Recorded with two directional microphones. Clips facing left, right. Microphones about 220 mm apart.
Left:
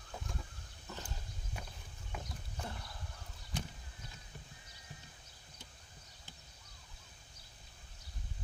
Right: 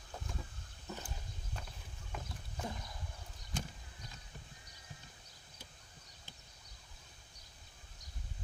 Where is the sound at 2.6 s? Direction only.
15° right (ahead or behind).